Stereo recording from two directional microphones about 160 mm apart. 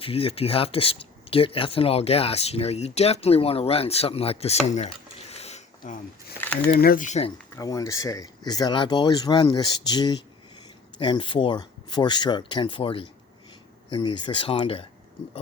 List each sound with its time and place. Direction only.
0.0 s speech: 35° left (ahead or behind)
5.3 s a sound: 40° left (ahead or behind)
6.4 s speech: 10° left (ahead or behind)
6.7 s speech: 65° left (ahead or behind); by 7.3 s 50° left (ahead or behind)
7.5 s speech: 20° left (ahead or behind)